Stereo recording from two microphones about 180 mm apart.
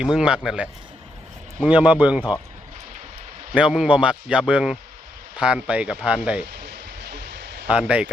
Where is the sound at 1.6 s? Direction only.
5° right (ahead or behind).